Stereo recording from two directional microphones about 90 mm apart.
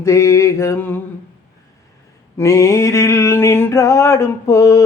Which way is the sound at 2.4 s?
35° left (ahead or behind).